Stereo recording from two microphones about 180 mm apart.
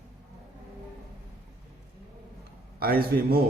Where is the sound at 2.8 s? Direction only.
55° right (ahead or behind).